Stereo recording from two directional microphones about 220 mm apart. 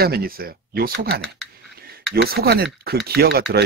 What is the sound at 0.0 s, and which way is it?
Speech, 45° right (ahead or behind).